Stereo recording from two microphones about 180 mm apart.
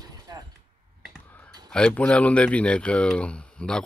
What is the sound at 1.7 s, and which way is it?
Speech, 5° left (ahead or behind).